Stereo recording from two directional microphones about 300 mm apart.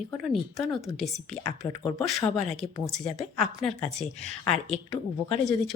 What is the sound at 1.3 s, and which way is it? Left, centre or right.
Speech, left.